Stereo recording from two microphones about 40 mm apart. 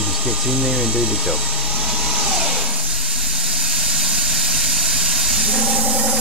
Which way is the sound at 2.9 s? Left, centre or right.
Centre.